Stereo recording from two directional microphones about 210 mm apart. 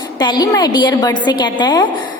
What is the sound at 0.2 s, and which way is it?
A woman's voice, 20° left (ahead or behind).